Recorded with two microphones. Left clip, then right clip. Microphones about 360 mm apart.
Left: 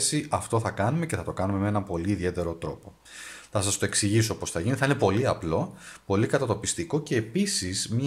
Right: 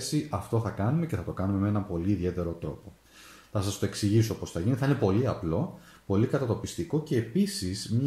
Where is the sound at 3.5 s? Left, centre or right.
Left.